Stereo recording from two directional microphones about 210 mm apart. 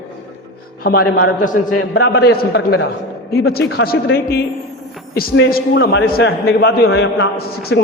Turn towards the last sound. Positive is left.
turn(degrees=50)  # may be behind; listen again after turning